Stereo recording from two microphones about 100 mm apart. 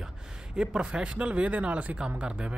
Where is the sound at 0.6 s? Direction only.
5° right (ahead or behind).